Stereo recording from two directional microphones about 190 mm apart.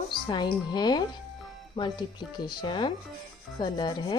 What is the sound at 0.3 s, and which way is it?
Rub, 20° left (ahead or behind).